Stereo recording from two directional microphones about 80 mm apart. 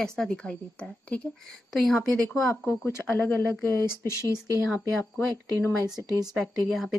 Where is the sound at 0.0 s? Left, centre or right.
Centre.